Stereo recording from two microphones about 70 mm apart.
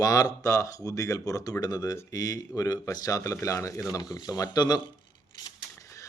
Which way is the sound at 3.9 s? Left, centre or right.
Left.